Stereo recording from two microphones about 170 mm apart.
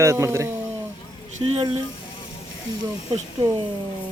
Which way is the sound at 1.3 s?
35° right (ahead or behind).